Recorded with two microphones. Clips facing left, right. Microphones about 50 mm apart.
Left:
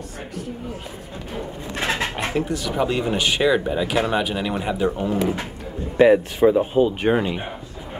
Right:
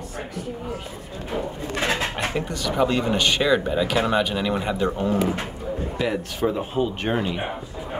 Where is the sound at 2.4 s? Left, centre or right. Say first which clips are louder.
Even; centre.